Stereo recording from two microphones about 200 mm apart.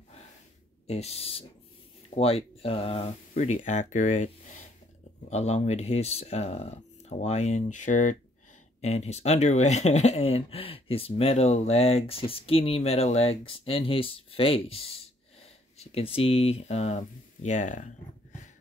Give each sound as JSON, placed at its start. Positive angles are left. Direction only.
{"t": 0.8, "sound": "speech", "side_deg": 30}
{"t": 5.3, "sound": "speech", "side_deg": 35}